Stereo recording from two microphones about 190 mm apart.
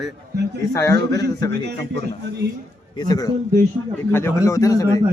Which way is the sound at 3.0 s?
20° left (ahead or behind).